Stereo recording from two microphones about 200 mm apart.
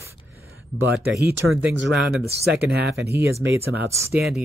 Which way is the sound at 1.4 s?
90° right.